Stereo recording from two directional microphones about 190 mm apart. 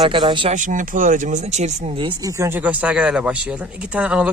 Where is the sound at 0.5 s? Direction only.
45° right (ahead or behind).